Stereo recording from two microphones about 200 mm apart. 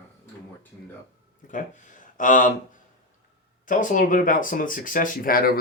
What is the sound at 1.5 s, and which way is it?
Speech, 40° left (ahead or behind).